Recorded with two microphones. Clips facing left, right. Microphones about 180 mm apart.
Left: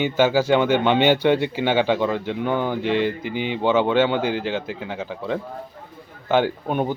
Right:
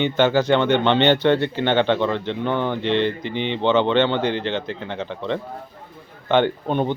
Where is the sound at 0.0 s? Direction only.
5° left (ahead or behind).